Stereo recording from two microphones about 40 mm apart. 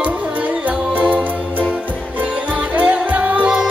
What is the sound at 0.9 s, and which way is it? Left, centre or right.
Music, right.